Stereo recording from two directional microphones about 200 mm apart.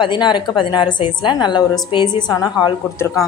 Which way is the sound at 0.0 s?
25° left (ahead or behind).